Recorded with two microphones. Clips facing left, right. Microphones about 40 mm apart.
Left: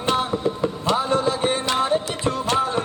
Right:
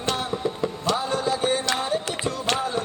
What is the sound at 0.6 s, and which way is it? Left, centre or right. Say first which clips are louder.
Music: left 2 dB; left.